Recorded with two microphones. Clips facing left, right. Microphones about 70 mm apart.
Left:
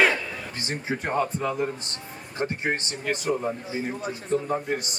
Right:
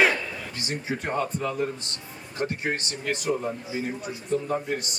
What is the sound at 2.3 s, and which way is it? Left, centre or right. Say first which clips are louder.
Speech: left 1 dB; left.